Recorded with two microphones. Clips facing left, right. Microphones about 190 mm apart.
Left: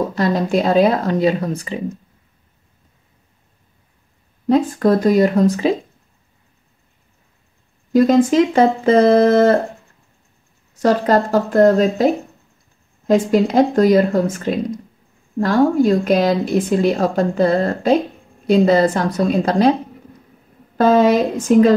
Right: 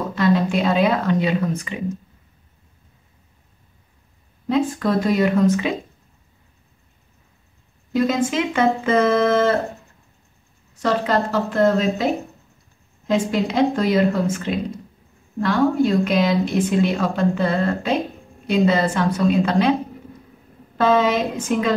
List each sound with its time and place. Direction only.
0.1 s a woman's voice: 40° left (ahead or behind)
4.5 s a woman's voice: 40° left (ahead or behind)
7.9 s a woman's voice: 40° left (ahead or behind)
10.8 s a woman's voice: 40° left (ahead or behind)
20.7 s a woman's voice: 40° left (ahead or behind)